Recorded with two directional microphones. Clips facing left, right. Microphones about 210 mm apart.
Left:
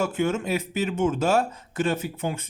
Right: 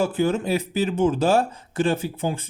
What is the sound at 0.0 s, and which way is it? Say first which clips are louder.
Speech: right 3 dB; 35° right (ahead or behind).